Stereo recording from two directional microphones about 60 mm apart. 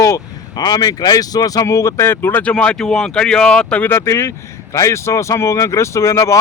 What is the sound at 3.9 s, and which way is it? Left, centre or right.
A man's voice, left.